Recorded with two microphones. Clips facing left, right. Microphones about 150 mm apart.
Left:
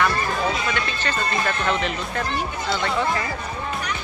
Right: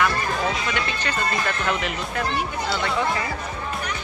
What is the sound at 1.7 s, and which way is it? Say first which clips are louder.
Speech: left 2 dB; 10° right (ahead or behind).